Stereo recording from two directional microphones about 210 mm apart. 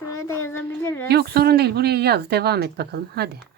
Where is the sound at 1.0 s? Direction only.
50° right (ahead or behind).